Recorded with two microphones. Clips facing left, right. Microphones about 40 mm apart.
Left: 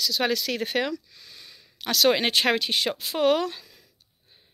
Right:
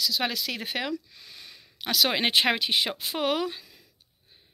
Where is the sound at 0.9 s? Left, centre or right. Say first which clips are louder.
Right 1 dB; right.